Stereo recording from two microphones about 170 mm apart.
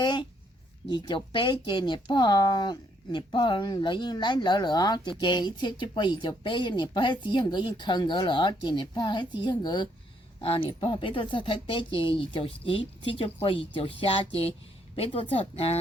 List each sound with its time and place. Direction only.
0.0 s speech: 30° left (ahead or behind)